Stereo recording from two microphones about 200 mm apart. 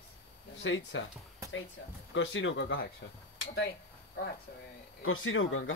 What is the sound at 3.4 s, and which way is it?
Speech, 55° left (ahead or behind).